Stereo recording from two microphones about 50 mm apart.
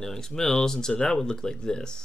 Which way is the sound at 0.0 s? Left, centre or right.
Centre.